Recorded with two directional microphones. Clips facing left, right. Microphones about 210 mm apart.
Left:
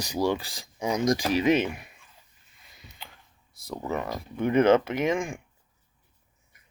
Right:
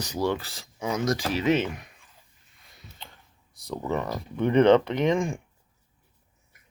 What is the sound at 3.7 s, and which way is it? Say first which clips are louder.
Speech: right 2 dB; 5° left (ahead or behind).